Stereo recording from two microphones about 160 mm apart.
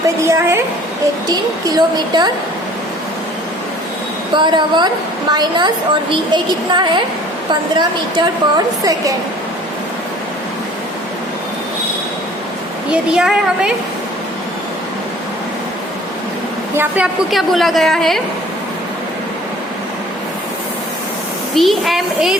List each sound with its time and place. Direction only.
0.3 s a woman's voice: 15° right (ahead or behind)
4.4 s a woman's voice: 30° right (ahead or behind)
12.9 s a child's voice: 5° right (ahead or behind)
16.7 s a woman's voice: 10° right (ahead or behind)
17.3 s a child's voice: centre (ahead or behind)
21.5 s a child's voice: centre (ahead or behind)